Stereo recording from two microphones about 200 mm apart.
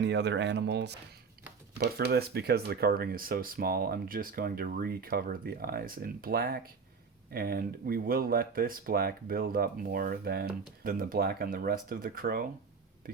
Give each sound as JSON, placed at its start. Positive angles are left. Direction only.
{"t": 0.0, "sound": "speech", "side_deg": -60}